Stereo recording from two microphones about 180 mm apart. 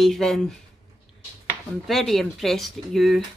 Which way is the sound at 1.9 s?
Centre (ahead or behind).